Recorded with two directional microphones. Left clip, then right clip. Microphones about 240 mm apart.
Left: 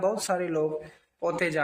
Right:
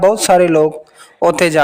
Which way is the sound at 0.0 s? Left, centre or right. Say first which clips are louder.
Right 17 dB; right.